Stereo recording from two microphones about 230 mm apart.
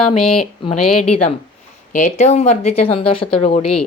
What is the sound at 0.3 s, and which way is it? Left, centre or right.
Speech, left.